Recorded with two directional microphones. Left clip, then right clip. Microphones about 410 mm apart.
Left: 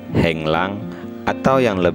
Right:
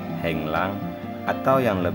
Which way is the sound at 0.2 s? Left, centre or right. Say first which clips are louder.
Left 7 dB; centre.